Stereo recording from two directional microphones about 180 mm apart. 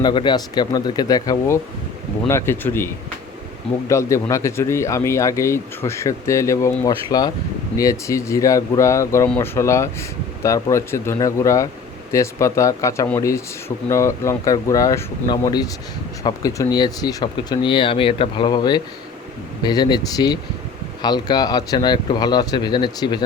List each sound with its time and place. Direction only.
0.0 s speech: 25° left (ahead or behind)